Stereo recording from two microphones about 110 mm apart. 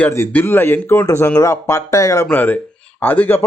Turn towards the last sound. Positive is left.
turn(degrees=15)  # may be behind; listen again after turning